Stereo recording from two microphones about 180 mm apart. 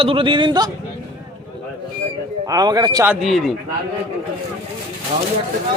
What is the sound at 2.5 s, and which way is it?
Speech, 20° right (ahead or behind).